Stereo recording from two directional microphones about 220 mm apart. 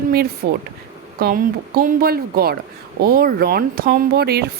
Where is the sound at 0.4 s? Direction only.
50° right (ahead or behind).